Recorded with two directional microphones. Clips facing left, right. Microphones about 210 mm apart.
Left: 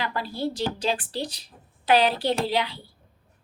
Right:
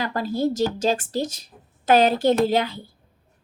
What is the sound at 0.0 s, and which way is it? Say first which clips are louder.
A woman's voice: right 5 dB; 45° right (ahead or behind).